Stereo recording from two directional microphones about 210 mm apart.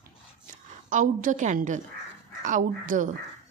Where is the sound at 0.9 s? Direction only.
40° right (ahead or behind).